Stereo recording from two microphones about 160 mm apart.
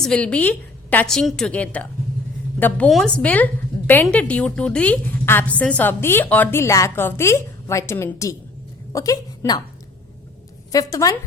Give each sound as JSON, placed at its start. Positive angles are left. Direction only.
{"t": 0.0, "sound": "a woman's voice", "side_deg": 5}
{"t": 10.7, "sound": "a woman's voice", "side_deg": 25}